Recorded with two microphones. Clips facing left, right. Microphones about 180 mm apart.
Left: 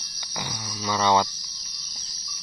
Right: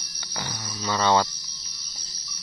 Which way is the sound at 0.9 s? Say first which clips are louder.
Even; 15° left (ahead or behind).